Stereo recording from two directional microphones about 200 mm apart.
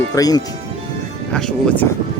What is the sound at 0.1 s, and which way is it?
Speech, 20° left (ahead or behind).